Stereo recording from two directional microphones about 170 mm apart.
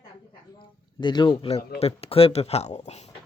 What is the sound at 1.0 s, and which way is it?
Speech, 25° left (ahead or behind).